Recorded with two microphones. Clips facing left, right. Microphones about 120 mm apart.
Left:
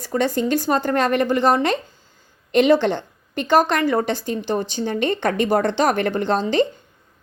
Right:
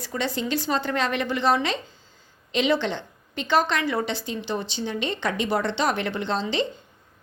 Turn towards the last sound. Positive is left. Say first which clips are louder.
# left 7 dB
turn(degrees=50)  # may be behind; listen again after turning